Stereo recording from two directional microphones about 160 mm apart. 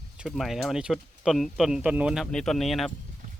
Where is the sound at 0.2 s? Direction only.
Centre (ahead or behind).